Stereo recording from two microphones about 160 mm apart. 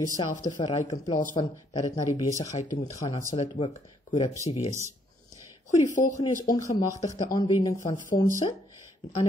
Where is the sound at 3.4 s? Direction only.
40° left (ahead or behind).